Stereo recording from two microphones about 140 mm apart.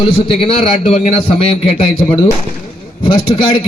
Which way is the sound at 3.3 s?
40° left (ahead or behind).